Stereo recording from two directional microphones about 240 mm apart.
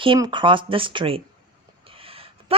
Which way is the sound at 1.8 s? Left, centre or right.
Right.